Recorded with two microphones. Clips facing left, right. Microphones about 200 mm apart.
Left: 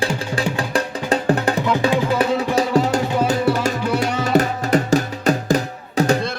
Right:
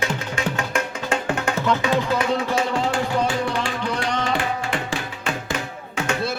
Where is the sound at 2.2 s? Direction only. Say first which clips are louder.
Left 4 dB; 35° left (ahead or behind).